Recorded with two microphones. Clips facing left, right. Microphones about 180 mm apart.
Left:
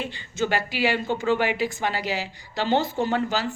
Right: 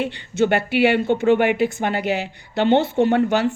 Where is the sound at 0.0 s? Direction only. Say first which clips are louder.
Right 7 dB; 65° right (ahead or behind).